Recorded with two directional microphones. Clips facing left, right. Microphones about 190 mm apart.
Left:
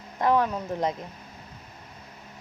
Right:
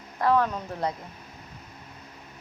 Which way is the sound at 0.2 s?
20° left (ahead or behind).